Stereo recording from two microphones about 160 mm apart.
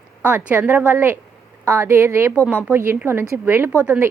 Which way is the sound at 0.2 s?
10° right (ahead or behind).